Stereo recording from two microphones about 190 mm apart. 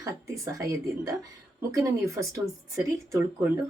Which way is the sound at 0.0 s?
15° right (ahead or behind).